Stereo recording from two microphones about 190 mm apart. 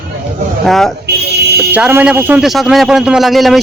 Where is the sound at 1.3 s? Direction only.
60° right (ahead or behind).